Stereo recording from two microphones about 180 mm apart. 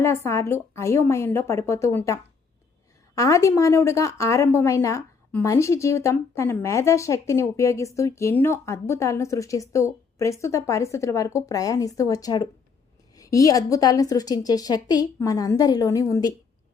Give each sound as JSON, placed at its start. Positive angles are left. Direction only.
{"t": 0.0, "sound": "speech", "side_deg": 15}
{"t": 3.2, "sound": "a woman's voice", "side_deg": 15}